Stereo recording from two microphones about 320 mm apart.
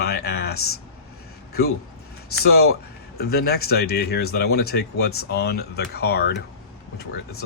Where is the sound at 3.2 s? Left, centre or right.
Left.